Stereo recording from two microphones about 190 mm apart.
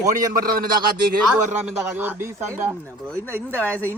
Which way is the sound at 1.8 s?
10° right (ahead or behind).